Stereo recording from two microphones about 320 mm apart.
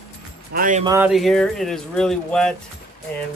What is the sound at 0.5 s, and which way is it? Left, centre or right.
Speech, right.